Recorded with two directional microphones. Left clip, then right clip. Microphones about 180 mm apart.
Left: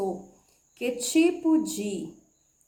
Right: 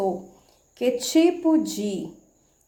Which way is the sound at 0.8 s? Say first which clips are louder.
Right 4 dB; 25° right (ahead or behind).